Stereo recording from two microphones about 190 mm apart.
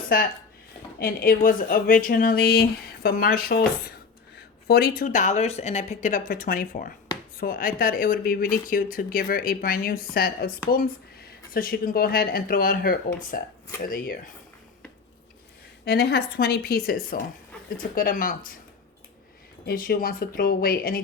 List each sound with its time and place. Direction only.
0.9 s speech: 50° left (ahead or behind)
15.8 s speech: 60° left (ahead or behind)
19.6 s speech: 50° left (ahead or behind)